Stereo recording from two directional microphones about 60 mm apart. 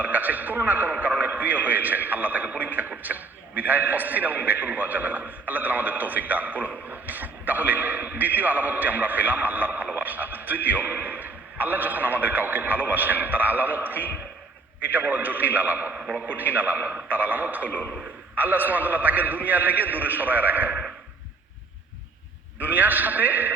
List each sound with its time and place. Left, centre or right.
0.0 s a man's voice: right
17.7 s a man's voice: left
18.3 s a man's voice: right
22.5 s a man's voice: right